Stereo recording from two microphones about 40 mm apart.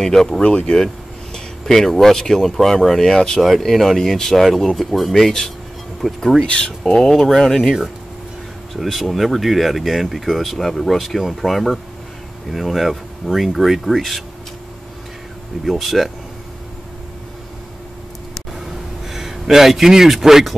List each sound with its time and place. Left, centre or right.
0.0 s speech: centre
0.4 s speech: left
1.3 s speech: centre
3.3 s speech: centre
6.4 s speech: left
6.8 s speech: centre
8.8 s speech: centre
15.6 s speech: centre
19.0 s speech: centre